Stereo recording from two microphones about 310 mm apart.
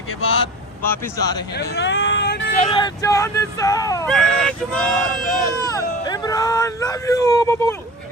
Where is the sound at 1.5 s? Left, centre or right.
Left.